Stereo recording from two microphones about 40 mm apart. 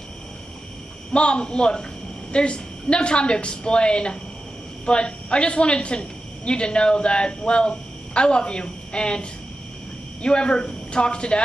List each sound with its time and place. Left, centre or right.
1.1 s a woman's voice: left